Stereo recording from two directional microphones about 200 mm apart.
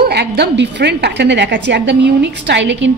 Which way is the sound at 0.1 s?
55° right (ahead or behind).